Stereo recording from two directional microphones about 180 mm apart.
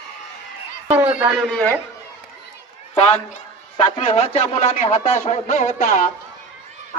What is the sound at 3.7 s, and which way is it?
Speech, 30° left (ahead or behind).